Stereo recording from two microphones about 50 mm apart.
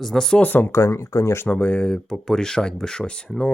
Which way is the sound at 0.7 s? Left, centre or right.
Left.